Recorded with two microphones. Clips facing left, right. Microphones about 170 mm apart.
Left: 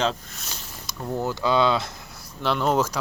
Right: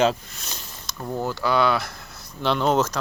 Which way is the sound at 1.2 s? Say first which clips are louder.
Even; 20° left (ahead or behind).